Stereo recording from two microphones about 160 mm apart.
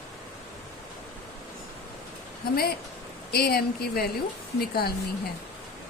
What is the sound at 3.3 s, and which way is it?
A woman's voice, 80° left.